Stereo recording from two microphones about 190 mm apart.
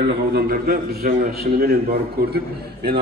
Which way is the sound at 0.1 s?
55° right (ahead or behind).